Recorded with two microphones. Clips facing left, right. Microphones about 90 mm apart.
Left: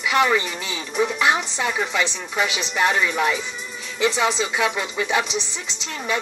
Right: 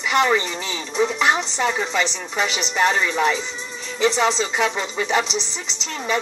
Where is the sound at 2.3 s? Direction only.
15° left (ahead or behind).